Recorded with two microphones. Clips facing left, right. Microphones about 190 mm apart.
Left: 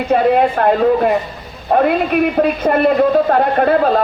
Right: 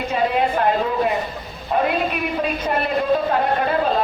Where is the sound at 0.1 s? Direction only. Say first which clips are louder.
Left 8 dB; 55° left (ahead or behind).